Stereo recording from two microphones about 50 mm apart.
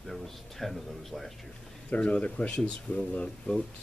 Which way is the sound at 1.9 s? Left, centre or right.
Left.